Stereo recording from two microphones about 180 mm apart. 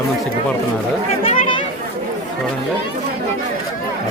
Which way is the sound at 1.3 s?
30° left (ahead or behind).